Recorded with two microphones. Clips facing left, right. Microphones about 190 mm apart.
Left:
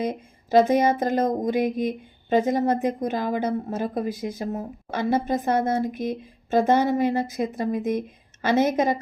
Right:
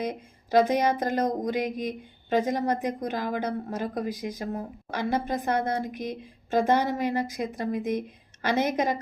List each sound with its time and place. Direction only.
0.0 s speech: 25° left (ahead or behind)